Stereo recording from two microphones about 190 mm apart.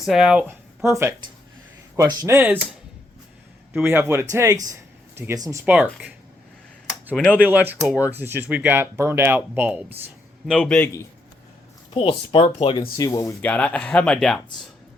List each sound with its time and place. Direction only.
0.0 s speech: centre (ahead or behind)
3.7 s speech: 10° right (ahead or behind)
7.1 s speech: 5° left (ahead or behind)
7.4 s a man's voice: 10° right (ahead or behind)
11.9 s speech: 30° left (ahead or behind)
13.0 s speech: 15° left (ahead or behind)